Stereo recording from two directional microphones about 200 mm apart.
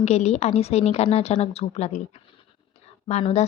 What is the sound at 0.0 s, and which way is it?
Speech, 35° left (ahead or behind).